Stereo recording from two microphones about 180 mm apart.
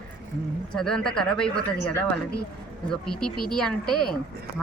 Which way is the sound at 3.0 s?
5° left (ahead or behind).